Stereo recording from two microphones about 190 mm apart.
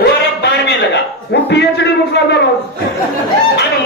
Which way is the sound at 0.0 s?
60° left (ahead or behind).